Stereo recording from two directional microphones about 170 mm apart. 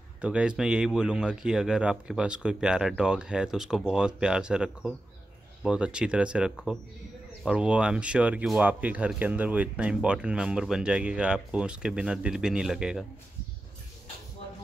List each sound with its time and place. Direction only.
0.2 s speech: 5° right (ahead or behind)